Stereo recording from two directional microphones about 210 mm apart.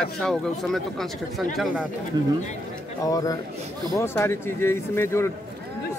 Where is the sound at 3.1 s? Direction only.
15° left (ahead or behind).